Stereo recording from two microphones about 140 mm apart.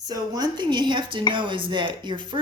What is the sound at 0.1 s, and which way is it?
Speech, 30° right (ahead or behind).